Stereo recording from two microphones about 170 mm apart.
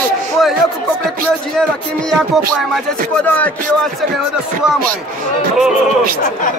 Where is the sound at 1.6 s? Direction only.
5° left (ahead or behind).